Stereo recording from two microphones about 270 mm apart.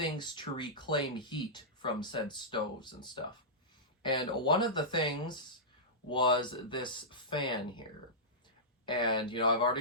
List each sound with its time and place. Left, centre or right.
0.0 s speech: centre
8.9 s speech: centre